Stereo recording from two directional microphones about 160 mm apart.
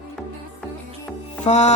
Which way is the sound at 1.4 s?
45° left (ahead or behind).